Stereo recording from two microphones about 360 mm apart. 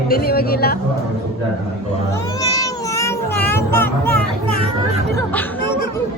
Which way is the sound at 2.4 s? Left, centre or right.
Centre.